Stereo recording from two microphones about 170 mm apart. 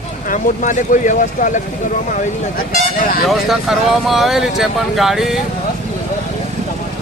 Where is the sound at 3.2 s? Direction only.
Centre (ahead or behind).